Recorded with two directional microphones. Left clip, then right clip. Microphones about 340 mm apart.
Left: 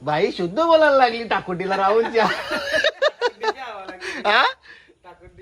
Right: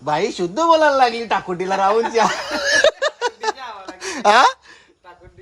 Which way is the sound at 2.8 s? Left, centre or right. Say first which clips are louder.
Right 3 dB; centre.